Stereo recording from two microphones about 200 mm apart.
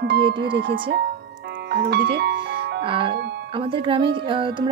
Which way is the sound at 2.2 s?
55° right (ahead or behind).